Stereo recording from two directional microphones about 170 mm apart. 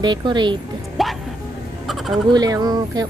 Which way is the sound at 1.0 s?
Centre (ahead or behind).